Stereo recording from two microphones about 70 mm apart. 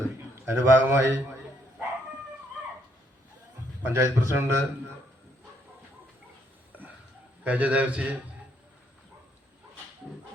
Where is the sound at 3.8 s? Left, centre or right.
Right.